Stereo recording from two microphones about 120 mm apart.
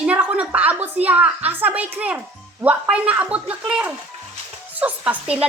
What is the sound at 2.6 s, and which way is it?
A woman's voice, 10° right (ahead or behind).